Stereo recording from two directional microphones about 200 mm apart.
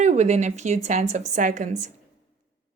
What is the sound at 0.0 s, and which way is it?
A woman's voice, 35° right (ahead or behind).